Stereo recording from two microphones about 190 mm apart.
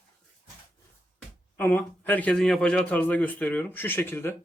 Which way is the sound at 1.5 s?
10° left (ahead or behind).